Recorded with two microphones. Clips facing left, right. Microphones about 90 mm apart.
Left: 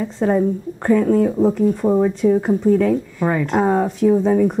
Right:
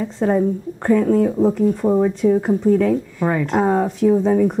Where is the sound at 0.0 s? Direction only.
25° left (ahead or behind).